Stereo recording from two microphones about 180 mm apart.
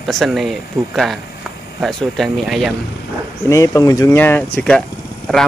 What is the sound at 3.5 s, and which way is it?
Speech, 20° left (ahead or behind).